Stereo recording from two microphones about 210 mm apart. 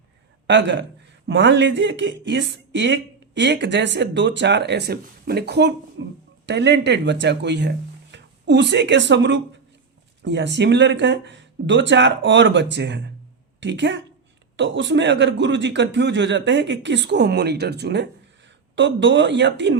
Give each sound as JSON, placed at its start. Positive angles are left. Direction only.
{"t": 0.4, "sound": "speech", "side_deg": -60}